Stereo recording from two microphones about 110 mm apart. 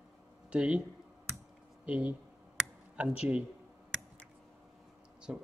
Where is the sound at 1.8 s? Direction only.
10° right (ahead or behind).